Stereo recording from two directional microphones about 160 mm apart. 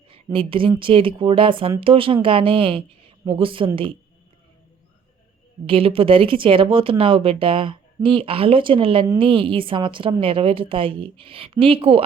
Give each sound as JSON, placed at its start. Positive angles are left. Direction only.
{"t": 0.3, "sound": "speech", "side_deg": -35}
{"t": 5.6, "sound": "speech", "side_deg": -35}